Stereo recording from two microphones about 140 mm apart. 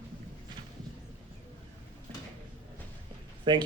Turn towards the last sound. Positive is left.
turn(degrees=-35)  # may be behind; listen again after turning